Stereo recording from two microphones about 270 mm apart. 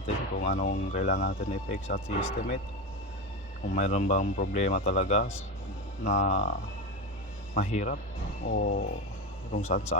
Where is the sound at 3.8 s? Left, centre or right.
Left.